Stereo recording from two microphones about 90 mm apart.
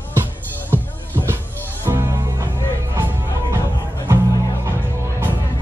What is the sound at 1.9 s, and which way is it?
Music, 45° right (ahead or behind).